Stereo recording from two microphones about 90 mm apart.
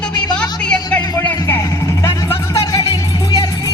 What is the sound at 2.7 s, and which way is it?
Music, 50° left (ahead or behind).